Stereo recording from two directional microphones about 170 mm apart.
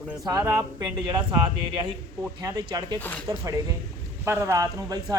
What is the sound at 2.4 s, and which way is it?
Speech, 20° right (ahead or behind).